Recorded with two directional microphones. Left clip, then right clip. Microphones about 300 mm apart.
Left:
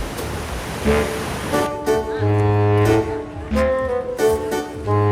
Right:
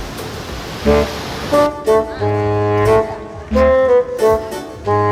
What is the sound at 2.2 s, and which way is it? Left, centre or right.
Music, centre.